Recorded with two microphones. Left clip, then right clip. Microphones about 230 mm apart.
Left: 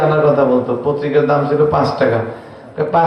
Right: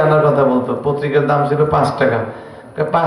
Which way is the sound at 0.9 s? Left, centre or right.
Right.